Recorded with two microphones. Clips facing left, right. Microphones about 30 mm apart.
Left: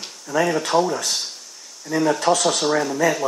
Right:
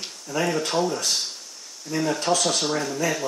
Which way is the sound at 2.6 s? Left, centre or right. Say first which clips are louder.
Left 5 dB; centre.